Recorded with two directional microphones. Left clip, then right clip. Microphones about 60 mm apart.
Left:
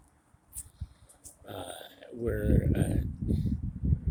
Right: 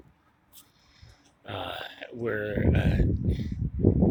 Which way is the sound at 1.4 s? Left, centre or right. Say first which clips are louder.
Right 7 dB; left.